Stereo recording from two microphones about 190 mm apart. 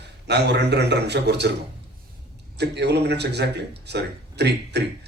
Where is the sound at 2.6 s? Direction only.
60° right (ahead or behind).